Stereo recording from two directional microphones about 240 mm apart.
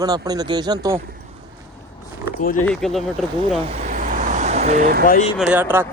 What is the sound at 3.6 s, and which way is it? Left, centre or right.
Vehicle, right.